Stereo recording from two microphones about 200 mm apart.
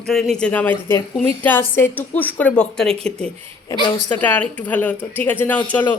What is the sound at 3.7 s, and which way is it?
Speech, 20° left (ahead or behind).